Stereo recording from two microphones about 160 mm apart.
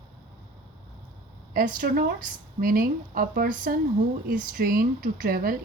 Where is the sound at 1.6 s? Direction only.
60° right (ahead or behind).